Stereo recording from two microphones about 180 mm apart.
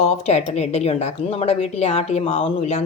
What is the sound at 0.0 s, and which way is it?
A woman's voice, 40° left (ahead or behind).